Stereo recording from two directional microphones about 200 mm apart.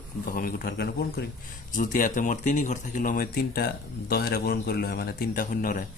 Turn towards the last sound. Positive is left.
turn(degrees=45)  # may be behind; listen again after turning